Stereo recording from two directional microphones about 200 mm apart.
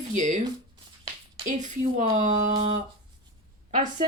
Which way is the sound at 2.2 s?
40° right (ahead or behind).